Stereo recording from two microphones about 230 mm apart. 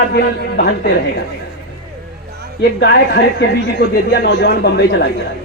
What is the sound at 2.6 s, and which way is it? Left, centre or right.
A man's voice, left.